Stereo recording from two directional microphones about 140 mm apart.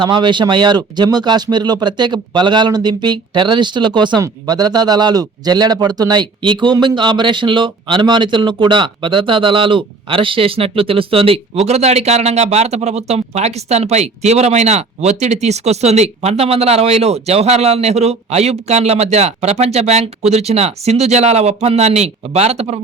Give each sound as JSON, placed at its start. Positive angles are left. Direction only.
{"t": 0.0, "sound": "speech", "side_deg": -35}